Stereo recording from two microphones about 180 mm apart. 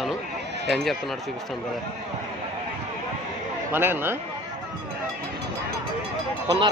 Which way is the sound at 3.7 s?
10° right (ahead or behind).